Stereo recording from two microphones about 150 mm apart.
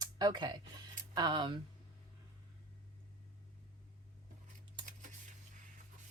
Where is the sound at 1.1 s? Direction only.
30° right (ahead or behind).